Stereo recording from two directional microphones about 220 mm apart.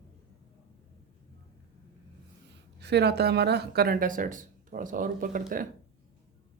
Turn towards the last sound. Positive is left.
turn(degrees=-40)  # may be behind; listen again after turning